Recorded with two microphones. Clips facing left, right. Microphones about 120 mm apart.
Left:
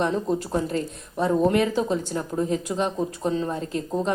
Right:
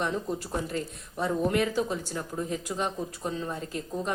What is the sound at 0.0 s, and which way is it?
Speech, 30° left (ahead or behind).